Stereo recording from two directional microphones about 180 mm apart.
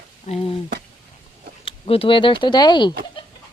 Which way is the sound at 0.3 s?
40° left (ahead or behind).